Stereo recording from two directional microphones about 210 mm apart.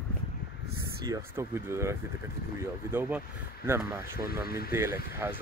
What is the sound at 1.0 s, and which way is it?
Speech, 15° right (ahead or behind).